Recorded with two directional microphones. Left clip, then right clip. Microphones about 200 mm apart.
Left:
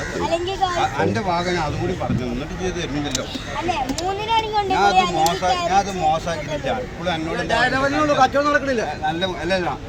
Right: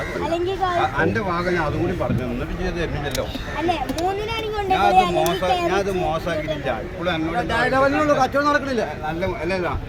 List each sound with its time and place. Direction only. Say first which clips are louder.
0.8 s speech: even; centre (ahead or behind)
4.8 s speech: even; 25° right (ahead or behind)
7.5 s a man's voice: even; 60° right (ahead or behind)